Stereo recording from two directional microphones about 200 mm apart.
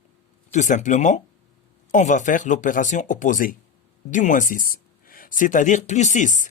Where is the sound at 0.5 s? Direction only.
35° left (ahead or behind).